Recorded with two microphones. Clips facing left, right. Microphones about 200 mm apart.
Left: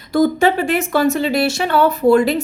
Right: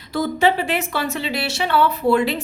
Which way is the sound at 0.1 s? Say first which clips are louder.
Left 5 dB; 50° left (ahead or behind).